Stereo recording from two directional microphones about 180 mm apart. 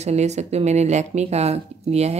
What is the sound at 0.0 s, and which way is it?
Speech, 40° right (ahead or behind).